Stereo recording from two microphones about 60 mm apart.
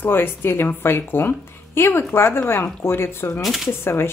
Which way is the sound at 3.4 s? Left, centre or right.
Centre.